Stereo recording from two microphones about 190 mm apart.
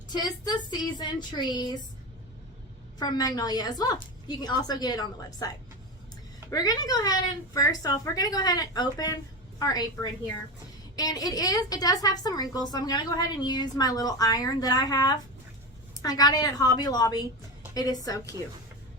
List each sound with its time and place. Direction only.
0.4 s a woman's voice: 20° left (ahead or behind)
3.0 s a woman's voice: 20° left (ahead or behind)
6.5 s a woman's voice: 20° left (ahead or behind)